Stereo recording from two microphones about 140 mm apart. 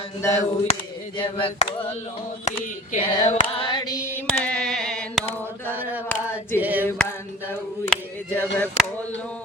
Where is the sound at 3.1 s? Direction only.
35° left (ahead or behind).